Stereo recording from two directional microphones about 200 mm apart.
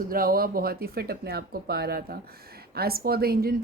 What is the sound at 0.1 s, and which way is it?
A woman's voice, 45° right (ahead or behind).